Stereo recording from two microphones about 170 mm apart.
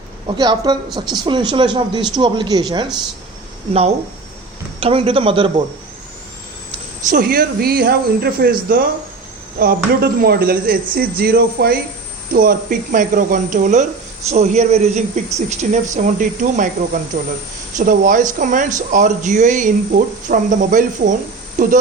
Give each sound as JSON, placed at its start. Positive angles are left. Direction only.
{"t": 0.3, "sound": "speech", "side_deg": -25}
{"t": 3.7, "sound": "a man's voice", "side_deg": -35}
{"t": 7.1, "sound": "a man's voice", "side_deg": -60}